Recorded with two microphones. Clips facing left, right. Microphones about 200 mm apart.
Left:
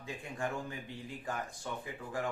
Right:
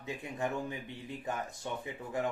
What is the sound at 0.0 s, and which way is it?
Speech, 20° right (ahead or behind).